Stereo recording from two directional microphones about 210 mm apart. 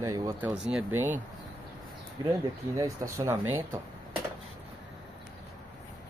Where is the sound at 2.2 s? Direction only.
15° right (ahead or behind).